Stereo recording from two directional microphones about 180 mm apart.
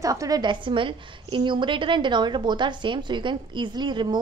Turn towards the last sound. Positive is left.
turn(degrees=-25)  # may be behind; listen again after turning